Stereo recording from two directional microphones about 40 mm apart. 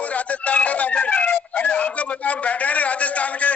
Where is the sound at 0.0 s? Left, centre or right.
Left.